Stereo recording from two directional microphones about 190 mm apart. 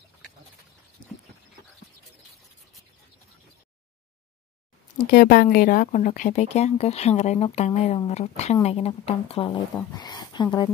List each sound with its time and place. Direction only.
4.9 s speech: 50° left (ahead or behind); by 10.7 s 20° left (ahead or behind)